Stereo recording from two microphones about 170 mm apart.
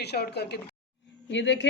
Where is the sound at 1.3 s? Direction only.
90° left.